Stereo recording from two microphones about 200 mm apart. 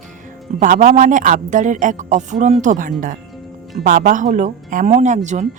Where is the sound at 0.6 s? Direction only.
40° right (ahead or behind).